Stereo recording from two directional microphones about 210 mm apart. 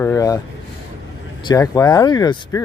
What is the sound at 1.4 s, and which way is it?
Speech, 15° left (ahead or behind).